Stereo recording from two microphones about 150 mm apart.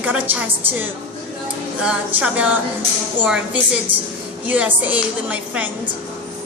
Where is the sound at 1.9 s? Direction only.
10° right (ahead or behind).